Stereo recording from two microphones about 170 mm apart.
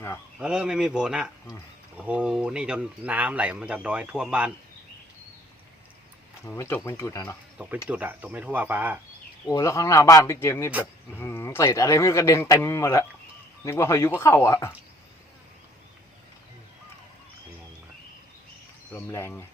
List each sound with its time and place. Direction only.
0.3 s speech: 5° right (ahead or behind)
6.4 s speech: 15° left (ahead or behind)
7.9 s speech: 10° right (ahead or behind)
9.5 s speech: 20° left (ahead or behind)
18.9 s speech: 15° left (ahead or behind)